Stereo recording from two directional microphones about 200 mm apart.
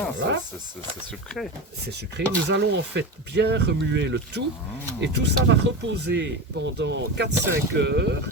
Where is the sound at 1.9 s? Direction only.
60° right (ahead or behind).